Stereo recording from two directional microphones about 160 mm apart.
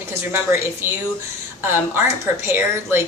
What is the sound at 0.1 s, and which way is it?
A woman's voice, 15° right (ahead or behind).